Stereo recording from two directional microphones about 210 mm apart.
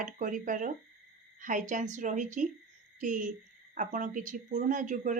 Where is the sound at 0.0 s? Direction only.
40° right (ahead or behind).